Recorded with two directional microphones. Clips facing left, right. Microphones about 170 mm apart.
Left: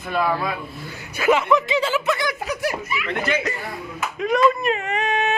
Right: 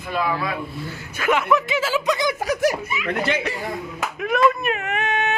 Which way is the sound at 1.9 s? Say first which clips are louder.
Right 1 dB; 20° right (ahead or behind).